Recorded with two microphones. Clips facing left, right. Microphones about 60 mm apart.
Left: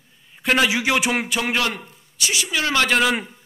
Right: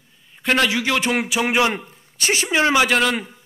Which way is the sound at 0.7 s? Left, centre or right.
Centre.